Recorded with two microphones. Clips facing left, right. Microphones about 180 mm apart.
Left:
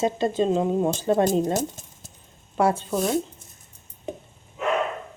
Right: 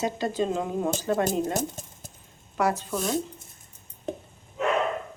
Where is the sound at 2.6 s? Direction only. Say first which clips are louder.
Left 4 dB; 30° left (ahead or behind).